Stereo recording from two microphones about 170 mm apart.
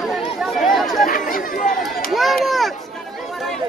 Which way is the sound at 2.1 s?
Centre (ahead or behind).